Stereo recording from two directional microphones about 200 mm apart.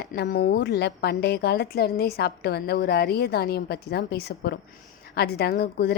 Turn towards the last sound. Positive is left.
turn(degrees=50)  # may be behind; listen again after turning